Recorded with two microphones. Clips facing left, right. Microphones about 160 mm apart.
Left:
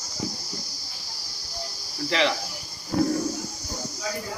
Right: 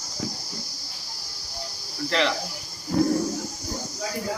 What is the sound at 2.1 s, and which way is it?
Speech, centre (ahead or behind).